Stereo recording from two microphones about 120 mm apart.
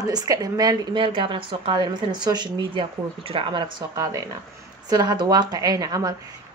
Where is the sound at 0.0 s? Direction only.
30° right (ahead or behind).